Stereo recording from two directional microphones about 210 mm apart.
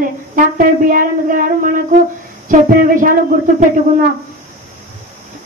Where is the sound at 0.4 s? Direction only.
40° right (ahead or behind).